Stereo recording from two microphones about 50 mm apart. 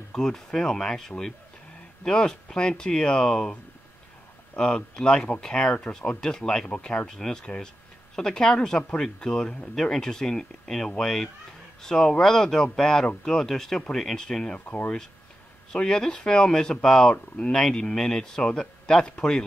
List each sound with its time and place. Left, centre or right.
0.1 s speech: centre
4.6 s speech: centre
15.7 s speech: centre